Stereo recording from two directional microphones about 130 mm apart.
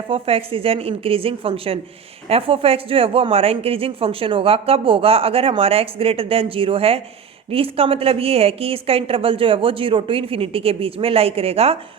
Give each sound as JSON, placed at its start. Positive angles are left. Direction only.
{"t": 0.1, "sound": "speech", "side_deg": -45}